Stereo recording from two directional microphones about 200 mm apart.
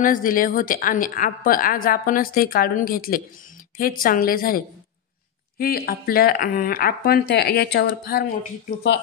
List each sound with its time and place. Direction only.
0.0 s a woman's voice: 45° left (ahead or behind)